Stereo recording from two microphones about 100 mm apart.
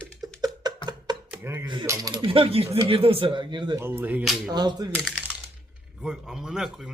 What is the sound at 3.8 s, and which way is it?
Speech, 20° right (ahead or behind).